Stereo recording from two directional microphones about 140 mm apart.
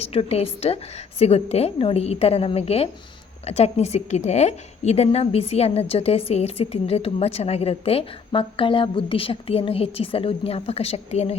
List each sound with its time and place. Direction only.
0.0 s a woman's voice: 45° left (ahead or behind)